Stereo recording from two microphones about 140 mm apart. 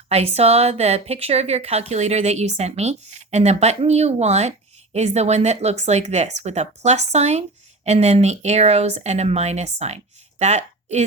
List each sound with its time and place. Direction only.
0.1 s a woman's voice: 50° right (ahead or behind)